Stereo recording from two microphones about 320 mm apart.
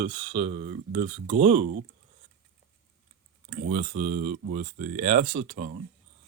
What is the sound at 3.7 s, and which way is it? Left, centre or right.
Speech, right.